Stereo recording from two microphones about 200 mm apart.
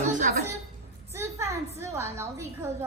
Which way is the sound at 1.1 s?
15° right (ahead or behind).